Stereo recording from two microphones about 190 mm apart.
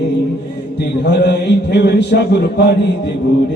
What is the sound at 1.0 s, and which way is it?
Music, 60° left (ahead or behind).